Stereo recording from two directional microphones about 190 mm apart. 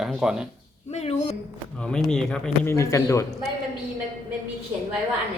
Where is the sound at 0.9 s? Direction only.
35° left (ahead or behind).